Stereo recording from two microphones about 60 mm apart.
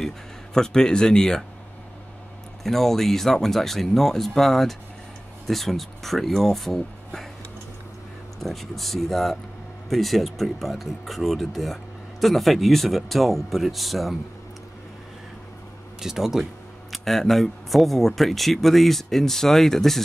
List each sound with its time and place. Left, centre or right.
0.6 s speech: centre
2.6 s speech: centre
8.4 s speech: centre
16.0 s speech: centre
16.9 s speech: centre